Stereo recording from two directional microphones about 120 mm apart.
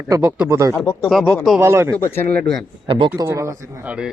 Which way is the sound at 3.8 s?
10° right (ahead or behind).